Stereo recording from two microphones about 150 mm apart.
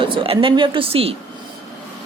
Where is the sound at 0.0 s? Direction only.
35° right (ahead or behind).